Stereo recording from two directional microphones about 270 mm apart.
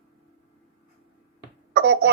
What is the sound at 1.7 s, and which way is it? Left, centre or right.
Speech, right.